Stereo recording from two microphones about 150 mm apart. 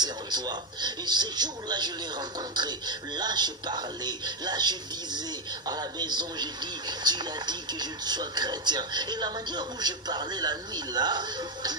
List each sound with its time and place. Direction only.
0.0 s a man's voice: 30° right (ahead or behind)